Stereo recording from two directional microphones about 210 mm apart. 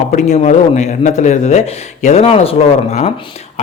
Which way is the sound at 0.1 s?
35° left (ahead or behind).